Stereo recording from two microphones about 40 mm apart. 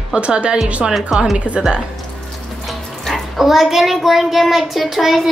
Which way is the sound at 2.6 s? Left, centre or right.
Centre.